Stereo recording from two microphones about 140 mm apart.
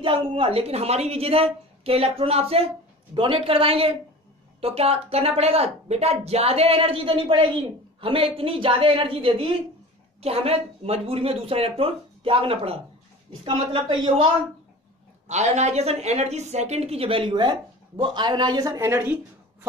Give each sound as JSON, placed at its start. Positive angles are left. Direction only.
{"t": 0.0, "sound": "a woman's voice", "side_deg": -40}
{"t": 15.2, "sound": "a woman's voice", "side_deg": -55}